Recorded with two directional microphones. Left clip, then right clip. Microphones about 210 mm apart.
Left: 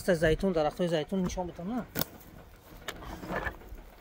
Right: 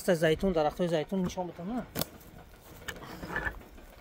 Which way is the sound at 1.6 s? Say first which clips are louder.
Even; 20° left (ahead or behind).